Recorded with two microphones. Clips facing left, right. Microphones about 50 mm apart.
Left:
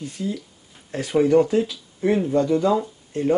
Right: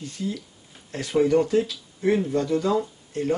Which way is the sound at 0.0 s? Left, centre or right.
Centre.